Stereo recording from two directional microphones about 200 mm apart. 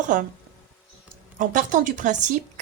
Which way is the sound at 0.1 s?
40° right (ahead or behind).